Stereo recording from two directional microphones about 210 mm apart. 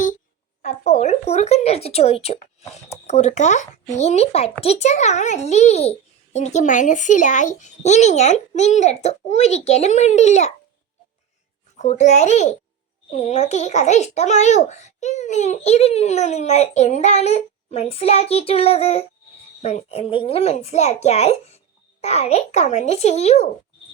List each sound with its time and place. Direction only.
0.6 s a child's voice: 30° left (ahead or behind)
11.8 s a child's voice: 30° left (ahead or behind)